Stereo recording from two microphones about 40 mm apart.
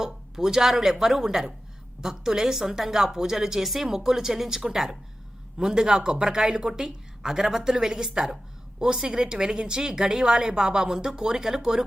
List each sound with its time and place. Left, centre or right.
0.0 s a woman's voice: centre